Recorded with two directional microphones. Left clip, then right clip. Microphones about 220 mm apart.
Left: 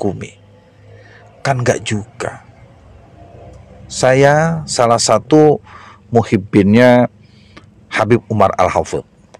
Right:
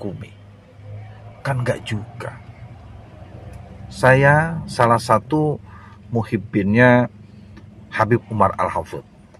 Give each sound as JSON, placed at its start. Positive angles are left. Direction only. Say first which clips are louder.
{"t": 1.4, "sound": "speech", "louder": "left 8 dB", "side_deg": 40}
{"t": 3.9, "sound": "speech", "louder": "left 4 dB", "side_deg": 40}